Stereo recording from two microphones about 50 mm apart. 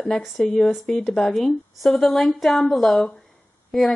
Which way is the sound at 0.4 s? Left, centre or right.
Centre.